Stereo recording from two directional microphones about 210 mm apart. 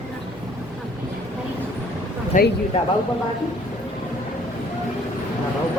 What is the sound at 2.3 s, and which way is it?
Speech, 40° left (ahead or behind).